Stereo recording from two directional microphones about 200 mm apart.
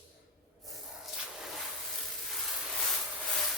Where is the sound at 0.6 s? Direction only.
Centre (ahead or behind).